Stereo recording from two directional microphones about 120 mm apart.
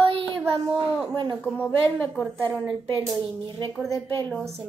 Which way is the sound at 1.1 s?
40° right (ahead or behind).